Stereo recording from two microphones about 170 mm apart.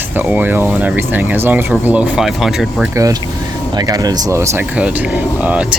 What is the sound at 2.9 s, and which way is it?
Speech, 20° right (ahead or behind).